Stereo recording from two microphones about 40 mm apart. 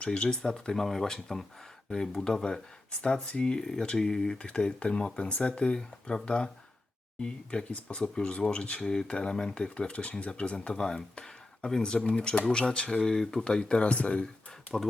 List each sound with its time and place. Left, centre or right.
0.0 s speech: left
4.4 s speech: left
10.8 s speech: centre